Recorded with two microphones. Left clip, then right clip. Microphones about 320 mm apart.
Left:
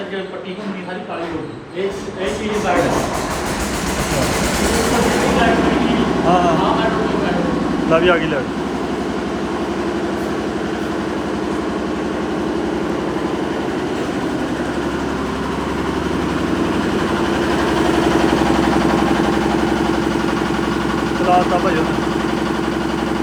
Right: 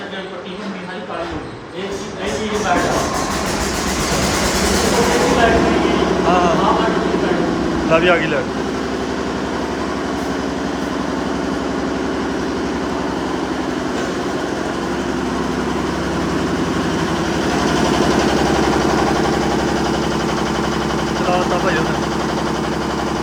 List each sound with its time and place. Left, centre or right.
7.9 s speech: centre